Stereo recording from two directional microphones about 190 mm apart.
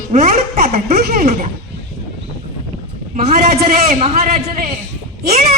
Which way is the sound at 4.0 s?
35° right (ahead or behind).